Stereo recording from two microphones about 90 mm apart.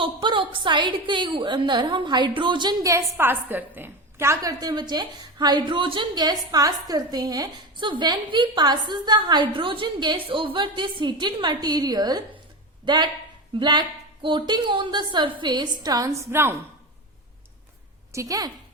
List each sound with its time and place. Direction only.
0.0 s a woman's voice: 65° right (ahead or behind)
3.2 s a woman's voice: 25° right (ahead or behind)
4.6 s a woman's voice: 50° right (ahead or behind)
7.8 s a woman's voice: 60° right (ahead or behind)
9.5 s a woman's voice: 70° right (ahead or behind)
10.2 s a woman's voice: 75° right (ahead or behind); by 16.6 s 30° right (ahead or behind)
18.1 s a woman's voice: 35° right (ahead or behind)